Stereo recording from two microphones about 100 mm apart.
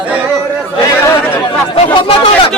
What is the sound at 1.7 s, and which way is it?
Speech, 65° left (ahead or behind).